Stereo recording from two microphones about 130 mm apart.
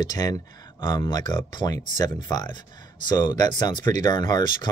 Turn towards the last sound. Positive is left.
turn(degrees=35)  # may be behind; listen again after turning